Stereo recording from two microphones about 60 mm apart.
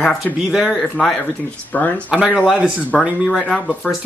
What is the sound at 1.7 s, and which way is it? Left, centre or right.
Speech, left.